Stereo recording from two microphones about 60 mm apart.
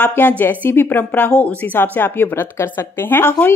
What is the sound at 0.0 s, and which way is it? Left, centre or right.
A woman's voice, left.